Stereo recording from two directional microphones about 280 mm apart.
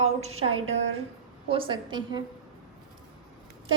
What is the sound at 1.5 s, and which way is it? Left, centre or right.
Speech, centre.